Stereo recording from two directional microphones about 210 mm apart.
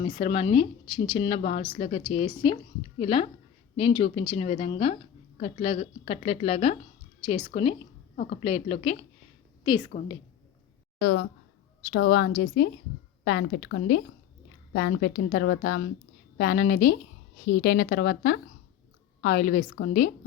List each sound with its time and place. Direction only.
0.0 s a woman's voice: 25° left (ahead or behind)
11.9 s a woman's voice: 45° left (ahead or behind)